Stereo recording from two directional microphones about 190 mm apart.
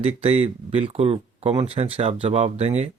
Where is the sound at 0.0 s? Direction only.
30° right (ahead or behind).